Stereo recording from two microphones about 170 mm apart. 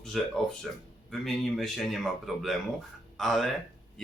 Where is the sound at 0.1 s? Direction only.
Centre (ahead or behind).